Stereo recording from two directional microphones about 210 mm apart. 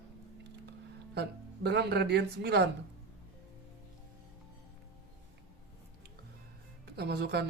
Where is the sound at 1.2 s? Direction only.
50° right (ahead or behind).